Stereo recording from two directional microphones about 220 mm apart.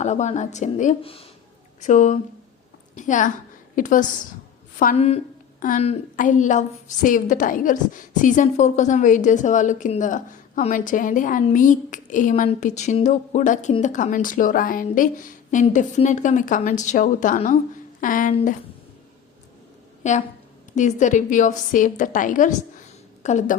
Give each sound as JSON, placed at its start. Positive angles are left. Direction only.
{"t": 0.0, "sound": "a woman's voice", "side_deg": 30}
{"t": 20.0, "sound": "a woman's voice", "side_deg": 35}